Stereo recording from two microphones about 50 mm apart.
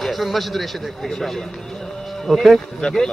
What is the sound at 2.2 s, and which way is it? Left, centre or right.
Speech, centre.